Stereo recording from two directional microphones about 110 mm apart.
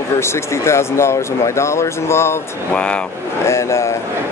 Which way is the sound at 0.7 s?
25° left (ahead or behind).